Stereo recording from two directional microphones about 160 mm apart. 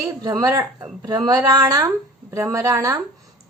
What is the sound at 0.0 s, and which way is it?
A woman's voice, 20° right (ahead or behind).